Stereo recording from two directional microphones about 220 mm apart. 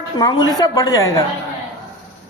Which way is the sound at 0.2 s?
20° left (ahead or behind).